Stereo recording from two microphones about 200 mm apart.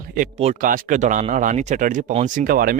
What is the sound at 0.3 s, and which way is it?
Speech, 35° right (ahead or behind).